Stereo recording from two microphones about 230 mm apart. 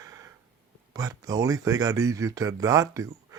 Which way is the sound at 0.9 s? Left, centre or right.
Centre.